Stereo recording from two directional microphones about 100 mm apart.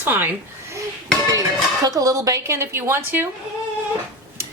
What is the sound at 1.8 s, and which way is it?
Speech, 35° right (ahead or behind).